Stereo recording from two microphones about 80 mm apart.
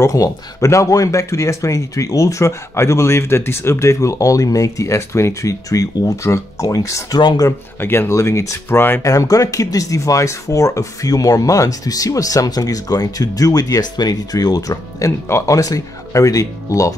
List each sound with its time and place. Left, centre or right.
0.0 s speech: left
7.2 s speech: left
7.8 s speech: left
8.1 s speech: left
8.6 s speech: left
9.0 s speech: left